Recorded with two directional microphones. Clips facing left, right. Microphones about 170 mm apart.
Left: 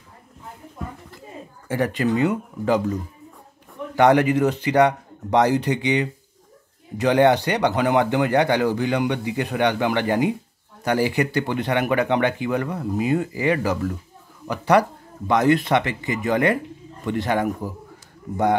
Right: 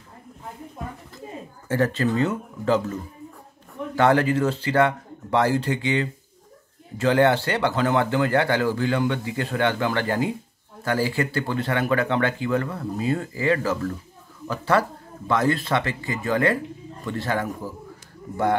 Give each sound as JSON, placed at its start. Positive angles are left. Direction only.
{"t": 1.7, "sound": "speech", "side_deg": 15}